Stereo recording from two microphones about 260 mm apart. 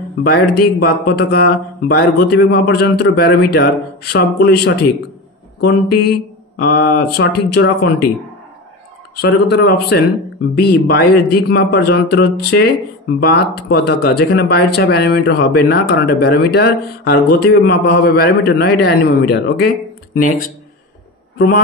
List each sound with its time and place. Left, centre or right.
0.2 s speech: left
6.6 s speech: left
9.2 s speech: left